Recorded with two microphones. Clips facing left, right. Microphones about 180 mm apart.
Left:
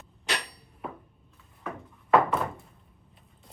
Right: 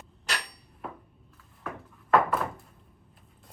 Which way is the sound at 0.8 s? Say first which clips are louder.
Left 2 dB; centre (ahead or behind).